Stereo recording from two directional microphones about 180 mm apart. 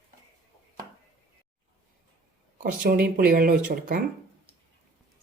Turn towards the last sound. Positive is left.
turn(degrees=-50)  # may be behind; listen again after turning